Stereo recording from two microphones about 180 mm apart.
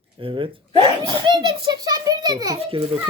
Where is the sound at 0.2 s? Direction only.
30° right (ahead or behind).